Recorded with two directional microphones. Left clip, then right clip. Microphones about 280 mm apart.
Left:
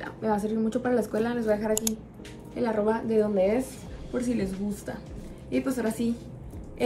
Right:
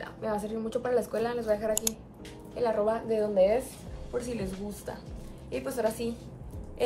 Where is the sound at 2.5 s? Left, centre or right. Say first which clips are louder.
Left 1 dB; right.